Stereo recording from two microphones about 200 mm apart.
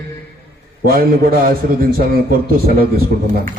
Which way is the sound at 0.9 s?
45° right (ahead or behind).